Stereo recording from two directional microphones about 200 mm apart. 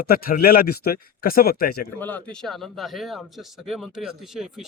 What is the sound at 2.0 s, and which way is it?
A man's voice, 10° left (ahead or behind).